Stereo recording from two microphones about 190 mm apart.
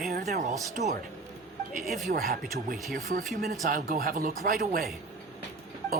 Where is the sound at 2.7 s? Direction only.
Centre (ahead or behind).